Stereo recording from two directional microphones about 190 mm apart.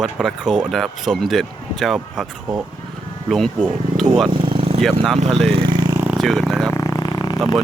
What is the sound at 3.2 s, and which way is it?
Speech, centre (ahead or behind).